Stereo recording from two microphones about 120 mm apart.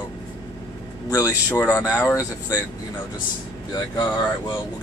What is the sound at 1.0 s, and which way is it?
Speech, 30° left (ahead or behind).